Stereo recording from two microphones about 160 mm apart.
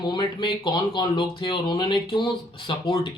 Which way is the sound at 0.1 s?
30° left (ahead or behind).